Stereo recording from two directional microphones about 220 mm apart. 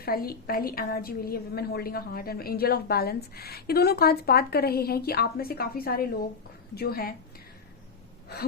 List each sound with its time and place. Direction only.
0.0 s a woman's voice: 45° left (ahead or behind)